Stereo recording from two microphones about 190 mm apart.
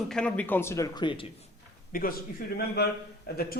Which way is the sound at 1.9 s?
50° left (ahead or behind).